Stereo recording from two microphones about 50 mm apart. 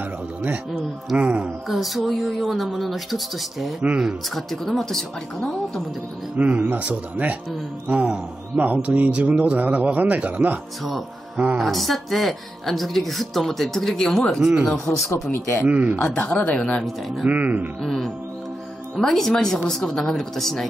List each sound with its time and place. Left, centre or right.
1.1 s speech: right
1.7 s speech: centre
6.3 s a man's voice: right
11.6 s speech: centre
14.4 s speech: centre
15.3 s speech: left
15.6 s a man's voice: right
16.0 s speech: left
17.3 s a man's voice: right
17.8 s speech: centre